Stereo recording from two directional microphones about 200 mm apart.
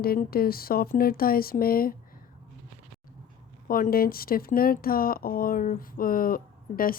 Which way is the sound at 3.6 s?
45° left (ahead or behind).